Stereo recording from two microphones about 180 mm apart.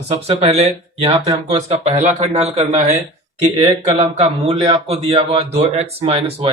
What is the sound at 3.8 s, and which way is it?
Speech, 35° right (ahead or behind).